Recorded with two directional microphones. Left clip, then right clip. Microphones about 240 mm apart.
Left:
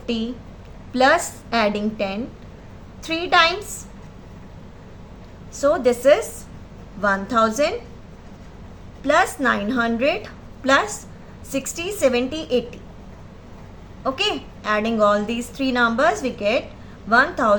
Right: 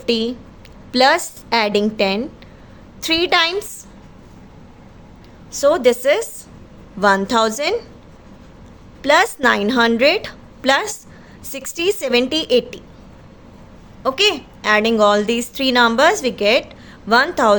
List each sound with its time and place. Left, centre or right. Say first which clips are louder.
0.0 s a woman's voice: right 8 dB; right
5.5 s a woman's voice: right 4 dB; right
9.0 s a woman's voice: right 4 dB; right
14.0 s a woman's voice: right 6 dB; right